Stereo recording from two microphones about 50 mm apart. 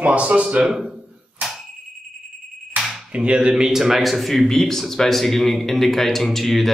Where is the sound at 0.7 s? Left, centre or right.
Centre.